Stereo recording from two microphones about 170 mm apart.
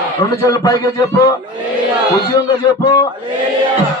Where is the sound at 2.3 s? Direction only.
20° left (ahead or behind).